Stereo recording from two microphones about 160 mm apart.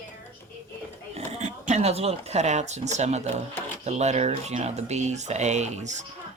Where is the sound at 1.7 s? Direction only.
40° right (ahead or behind).